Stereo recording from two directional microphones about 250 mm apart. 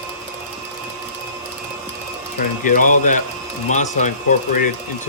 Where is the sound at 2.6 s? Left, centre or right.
Left.